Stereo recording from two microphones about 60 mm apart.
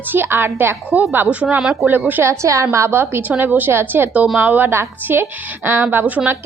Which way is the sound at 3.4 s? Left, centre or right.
Right.